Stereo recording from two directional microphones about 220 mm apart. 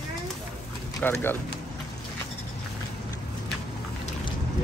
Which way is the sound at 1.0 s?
10° left (ahead or behind).